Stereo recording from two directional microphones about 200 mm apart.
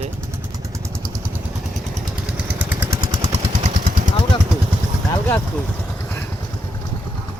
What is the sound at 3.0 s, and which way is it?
Vehicle, 20° right (ahead or behind).